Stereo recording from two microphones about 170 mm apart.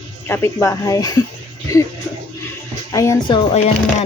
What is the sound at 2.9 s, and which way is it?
Speech, 20° left (ahead or behind).